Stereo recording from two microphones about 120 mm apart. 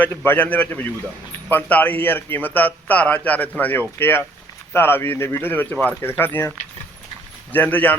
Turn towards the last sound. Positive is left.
turn(degrees=15)  # may be behind; listen again after turning